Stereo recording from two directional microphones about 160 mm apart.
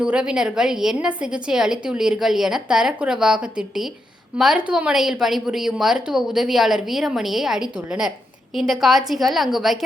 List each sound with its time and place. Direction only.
0.0 s a woman's voice: 5° right (ahead or behind)